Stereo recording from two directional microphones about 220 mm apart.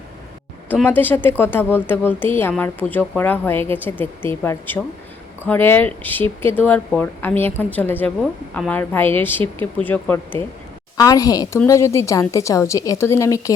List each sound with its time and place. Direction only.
0.7 s a woman's voice: 10° left (ahead or behind)